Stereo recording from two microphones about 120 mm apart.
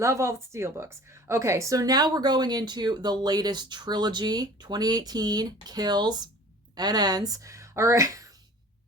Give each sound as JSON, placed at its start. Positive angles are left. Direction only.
{"t": 0.0, "sound": "a woman's voice", "side_deg": -25}